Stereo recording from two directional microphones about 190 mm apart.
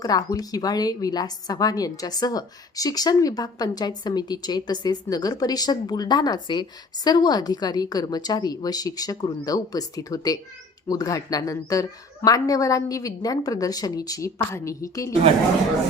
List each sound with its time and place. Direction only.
0.0 s a woman's voice: 20° left (ahead or behind)